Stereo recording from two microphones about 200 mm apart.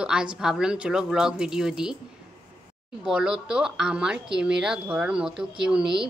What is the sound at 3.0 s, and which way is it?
A woman's voice, 5° right (ahead or behind).